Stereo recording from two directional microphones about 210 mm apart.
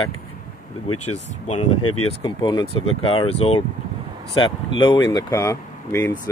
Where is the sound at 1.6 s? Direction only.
90° left.